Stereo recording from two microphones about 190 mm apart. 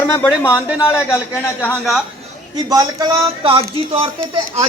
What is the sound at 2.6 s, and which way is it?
Speech, 20° right (ahead or behind).